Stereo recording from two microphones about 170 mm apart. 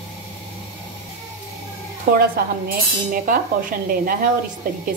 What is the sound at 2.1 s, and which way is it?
Speech, 65° right (ahead or behind).